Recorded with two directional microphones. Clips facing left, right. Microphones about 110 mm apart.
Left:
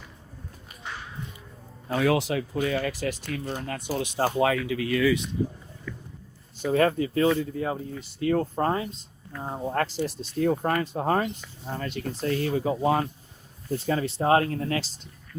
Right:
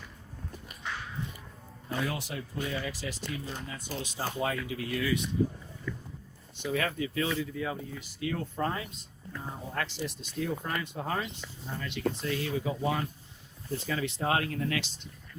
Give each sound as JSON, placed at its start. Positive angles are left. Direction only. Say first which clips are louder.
{"t": 1.9, "sound": "speech", "louder": "left 10 dB", "side_deg": 80}
{"t": 6.7, "sound": "speech", "louder": "left 9 dB", "side_deg": 40}
{"t": 10.5, "sound": "speech", "louder": "left 9 dB", "side_deg": 50}